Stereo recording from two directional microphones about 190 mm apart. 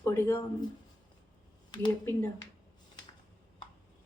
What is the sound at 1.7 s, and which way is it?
Speech, 25° left (ahead or behind).